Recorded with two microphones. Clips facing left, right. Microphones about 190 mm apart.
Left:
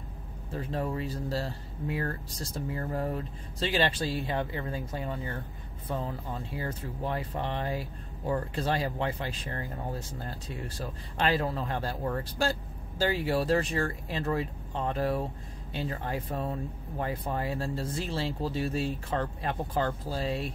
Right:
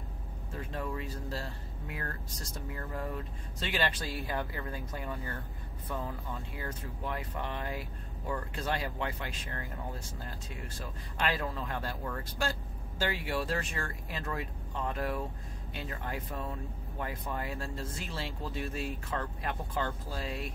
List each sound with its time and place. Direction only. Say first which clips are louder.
0.6 s speech: left 5 dB; 35° left (ahead or behind)
11.1 s speech: left 5 dB; 30° left (ahead or behind)